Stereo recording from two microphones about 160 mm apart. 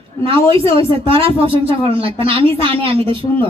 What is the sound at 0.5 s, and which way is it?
A man's voice, 35° right (ahead or behind).